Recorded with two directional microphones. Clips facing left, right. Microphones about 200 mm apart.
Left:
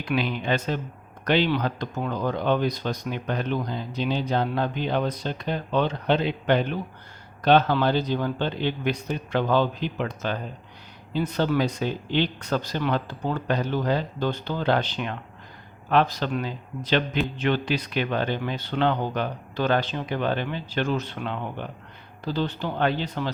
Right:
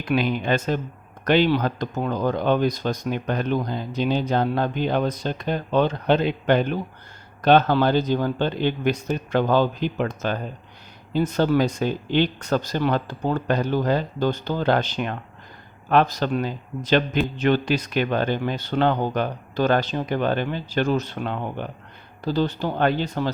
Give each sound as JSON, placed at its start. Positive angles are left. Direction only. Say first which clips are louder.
{"t": 0.0, "sound": "a man's voice", "louder": "right 4 dB", "side_deg": -50}